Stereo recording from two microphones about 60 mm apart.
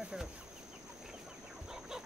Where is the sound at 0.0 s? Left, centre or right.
Centre.